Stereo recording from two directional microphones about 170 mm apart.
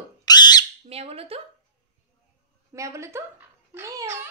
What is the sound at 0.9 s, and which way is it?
Speech, 35° right (ahead or behind).